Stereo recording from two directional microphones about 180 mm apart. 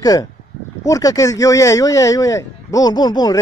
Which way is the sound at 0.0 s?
20° left (ahead or behind).